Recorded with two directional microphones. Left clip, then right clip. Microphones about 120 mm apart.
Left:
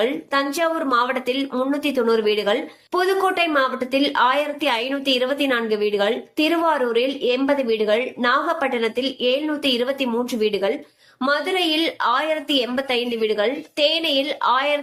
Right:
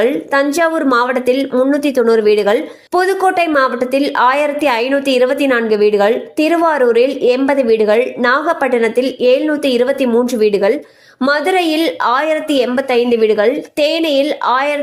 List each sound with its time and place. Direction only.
0.0 s speech: 60° right (ahead or behind)
1.0 s speech: 50° right (ahead or behind)